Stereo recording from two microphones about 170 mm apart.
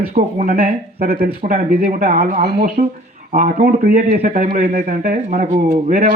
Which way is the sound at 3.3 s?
60° right (ahead or behind).